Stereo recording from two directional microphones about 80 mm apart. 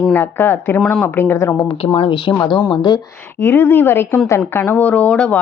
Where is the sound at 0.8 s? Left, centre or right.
Centre.